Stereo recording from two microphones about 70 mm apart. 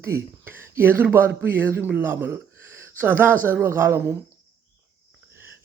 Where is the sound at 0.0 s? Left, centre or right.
Right.